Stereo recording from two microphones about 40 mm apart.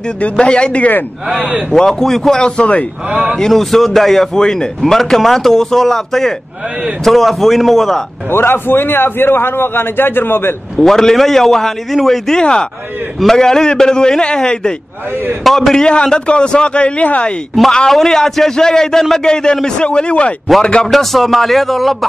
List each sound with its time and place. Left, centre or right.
0.2 s a man's voice: left
1.3 s speech: right
1.7 s a man's voice: centre
2.6 s speech: left
3.1 s speech: right
3.3 s a man's voice: centre
8.3 s a man's voice: left
10.8 s a man's voice: centre
12.4 s a man's voice: left
15.4 s a man's voice: centre
15.7 s a man's voice: centre
17.8 s a man's voice: centre; by 20.3 s left
20.8 s a man's voice: centre